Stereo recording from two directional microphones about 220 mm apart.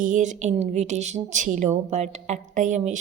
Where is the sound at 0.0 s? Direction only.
35° right (ahead or behind).